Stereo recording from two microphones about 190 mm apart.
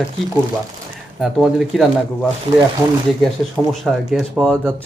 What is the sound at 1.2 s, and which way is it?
Speech, centre (ahead or behind).